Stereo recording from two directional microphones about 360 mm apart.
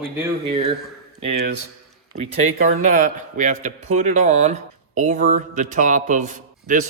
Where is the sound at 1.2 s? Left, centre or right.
Right.